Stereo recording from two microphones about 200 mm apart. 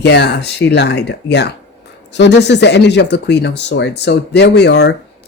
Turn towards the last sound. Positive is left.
turn(degrees=55)  # may be behind; listen again after turning